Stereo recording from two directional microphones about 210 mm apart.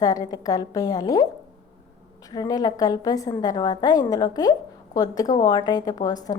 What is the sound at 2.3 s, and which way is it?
A woman's voice, 20° left (ahead or behind).